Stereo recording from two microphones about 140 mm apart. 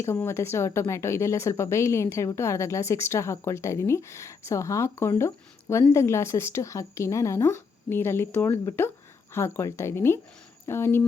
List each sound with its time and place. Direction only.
0.0 s a woman's voice: 20° left (ahead or behind)